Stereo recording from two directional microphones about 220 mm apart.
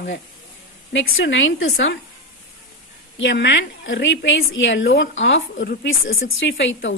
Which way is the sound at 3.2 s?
55° left (ahead or behind).